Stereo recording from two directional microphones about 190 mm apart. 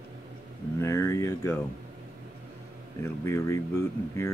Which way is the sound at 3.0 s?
15° left (ahead or behind).